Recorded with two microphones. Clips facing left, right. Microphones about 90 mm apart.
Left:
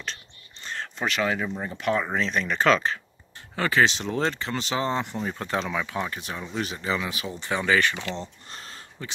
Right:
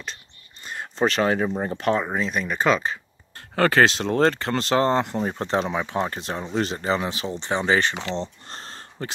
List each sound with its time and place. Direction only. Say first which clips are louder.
0.0 s whispering: even; 5° right (ahead or behind)
0.9 s speech: right 6 dB; 35° right (ahead or behind)
2.0 s speech: right 1 dB; 10° right (ahead or behind)
3.3 s speech: right 4 dB; 50° right (ahead or behind); by 8.3 s 25° right (ahead or behind)
8.5 s a sound: right 3 dB; 35° right (ahead or behind)